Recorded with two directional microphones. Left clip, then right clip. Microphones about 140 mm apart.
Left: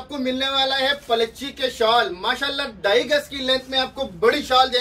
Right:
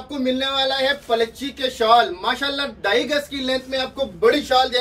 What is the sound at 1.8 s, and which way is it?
A man's voice, 20° left (ahead or behind).